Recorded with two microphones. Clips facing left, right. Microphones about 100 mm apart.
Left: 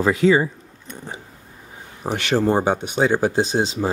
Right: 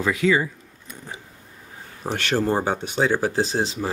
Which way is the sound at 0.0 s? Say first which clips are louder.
Left 4 dB; 35° left (ahead or behind).